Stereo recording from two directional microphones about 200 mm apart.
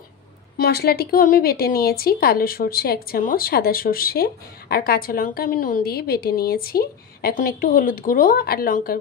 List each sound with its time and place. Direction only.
0.6 s a woman's voice: 50° left (ahead or behind)